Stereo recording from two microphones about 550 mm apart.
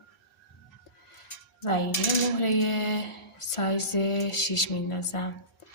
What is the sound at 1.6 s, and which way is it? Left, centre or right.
Dishes, left.